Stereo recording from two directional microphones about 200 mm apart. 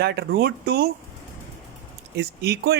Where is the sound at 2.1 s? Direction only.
55° right (ahead or behind).